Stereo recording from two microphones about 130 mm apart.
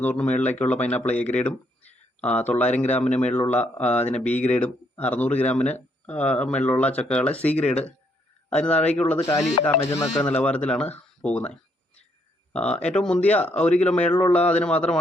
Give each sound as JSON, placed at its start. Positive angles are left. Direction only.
{"t": 0.0, "sound": "speech", "side_deg": 10}
{"t": 9.8, "sound": "speech", "side_deg": 20}
{"t": 10.2, "sound": "speech", "side_deg": 10}
{"t": 12.5, "sound": "speech", "side_deg": 10}